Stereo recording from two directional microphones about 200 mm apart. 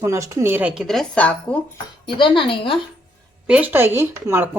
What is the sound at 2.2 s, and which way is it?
Speech, 25° left (ahead or behind).